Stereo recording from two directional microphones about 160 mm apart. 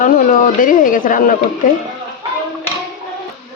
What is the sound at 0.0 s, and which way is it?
Speech, 55° left (ahead or behind).